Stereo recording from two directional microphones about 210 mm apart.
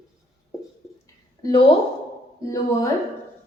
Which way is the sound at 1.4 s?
20° left (ahead or behind).